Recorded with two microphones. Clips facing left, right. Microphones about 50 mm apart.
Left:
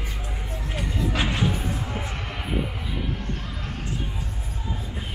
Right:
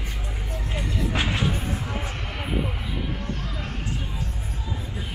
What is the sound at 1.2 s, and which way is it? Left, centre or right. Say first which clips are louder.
Music: left 1 dB; centre.